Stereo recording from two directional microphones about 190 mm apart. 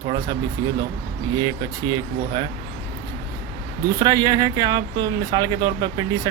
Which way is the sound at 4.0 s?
20° right (ahead or behind).